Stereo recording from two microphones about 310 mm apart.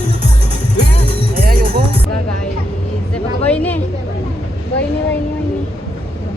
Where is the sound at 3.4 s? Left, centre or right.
Centre.